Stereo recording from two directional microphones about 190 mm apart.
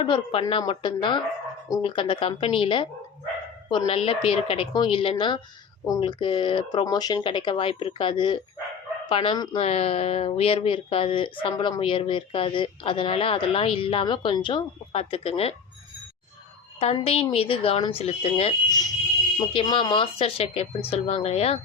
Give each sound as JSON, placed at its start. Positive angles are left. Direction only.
{"t": 0.0, "sound": "speech", "side_deg": 25}
{"t": 16.8, "sound": "speech", "side_deg": 30}